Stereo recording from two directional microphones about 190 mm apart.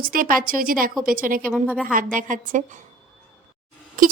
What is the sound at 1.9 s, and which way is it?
Speech, 45° right (ahead or behind).